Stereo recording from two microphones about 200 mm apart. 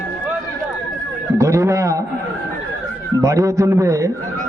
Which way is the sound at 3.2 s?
15° right (ahead or behind).